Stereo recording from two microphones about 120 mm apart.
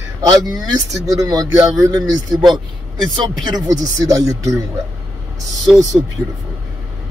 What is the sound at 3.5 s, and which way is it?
Speech, 30° right (ahead or behind).